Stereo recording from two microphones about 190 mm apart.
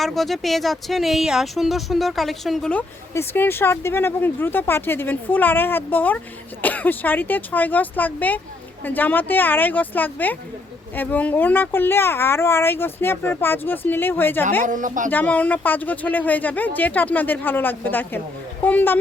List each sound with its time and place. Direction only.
0.0 s speech: centre (ahead or behind)
14.6 s a woman's voice: 45° right (ahead or behind)
15.1 s speech: 10° left (ahead or behind)